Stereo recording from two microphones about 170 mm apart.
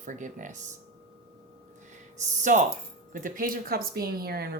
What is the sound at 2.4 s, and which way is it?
Speech, 45° right (ahead or behind).